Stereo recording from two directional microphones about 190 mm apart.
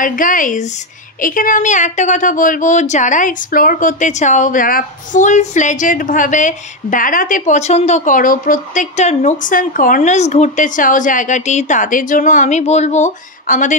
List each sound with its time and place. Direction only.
0.0 s speech: 45° left (ahead or behind)